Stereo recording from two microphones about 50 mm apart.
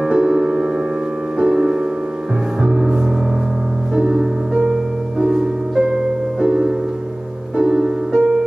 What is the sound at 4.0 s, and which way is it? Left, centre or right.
Music, centre.